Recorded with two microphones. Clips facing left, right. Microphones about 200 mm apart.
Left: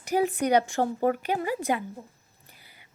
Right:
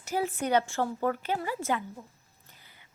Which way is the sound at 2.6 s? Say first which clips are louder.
Left 1 dB; 10° left (ahead or behind).